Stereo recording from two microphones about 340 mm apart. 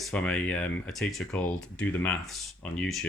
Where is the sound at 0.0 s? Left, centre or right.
Centre.